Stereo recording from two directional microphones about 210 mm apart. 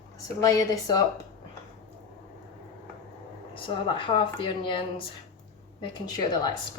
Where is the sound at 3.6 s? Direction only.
25° left (ahead or behind).